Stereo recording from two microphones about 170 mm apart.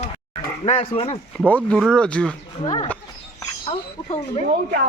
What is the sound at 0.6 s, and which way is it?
Speech, 35° left (ahead or behind).